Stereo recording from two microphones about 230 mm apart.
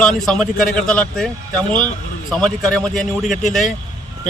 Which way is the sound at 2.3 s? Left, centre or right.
Centre.